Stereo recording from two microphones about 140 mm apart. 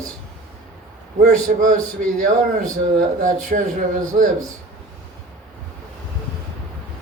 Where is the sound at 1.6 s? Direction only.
65° right (ahead or behind).